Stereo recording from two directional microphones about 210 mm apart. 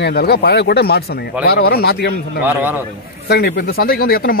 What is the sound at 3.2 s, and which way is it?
Speech, 50° left (ahead or behind).